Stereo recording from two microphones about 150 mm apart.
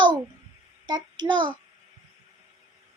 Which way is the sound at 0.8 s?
30° right (ahead or behind).